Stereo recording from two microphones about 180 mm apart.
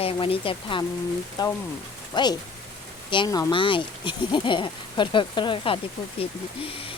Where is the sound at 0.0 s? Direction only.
30° left (ahead or behind).